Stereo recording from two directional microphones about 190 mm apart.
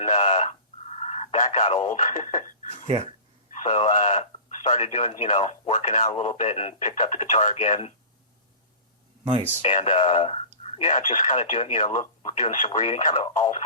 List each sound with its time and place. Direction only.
0.0 s radio: 35° left (ahead or behind)
0.9 s telephone: 35° left (ahead or behind)
3.6 s speech: 35° left (ahead or behind)
9.6 s speech: 30° left (ahead or behind)